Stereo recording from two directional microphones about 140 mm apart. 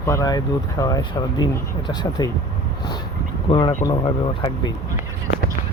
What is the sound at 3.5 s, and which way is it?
Speech, 35° left (ahead or behind).